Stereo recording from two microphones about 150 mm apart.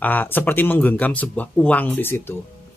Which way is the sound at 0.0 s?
10° left (ahead or behind).